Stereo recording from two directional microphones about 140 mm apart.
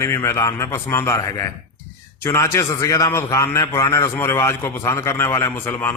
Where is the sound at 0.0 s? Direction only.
20° left (ahead or behind).